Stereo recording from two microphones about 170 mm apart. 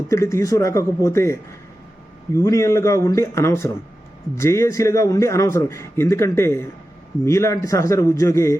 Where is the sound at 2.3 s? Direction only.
15° left (ahead or behind).